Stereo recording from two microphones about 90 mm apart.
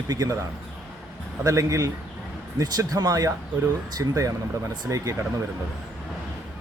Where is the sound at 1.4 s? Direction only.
35° right (ahead or behind).